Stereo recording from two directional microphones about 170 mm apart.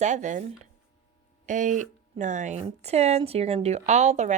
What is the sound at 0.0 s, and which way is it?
Speech, 45° right (ahead or behind).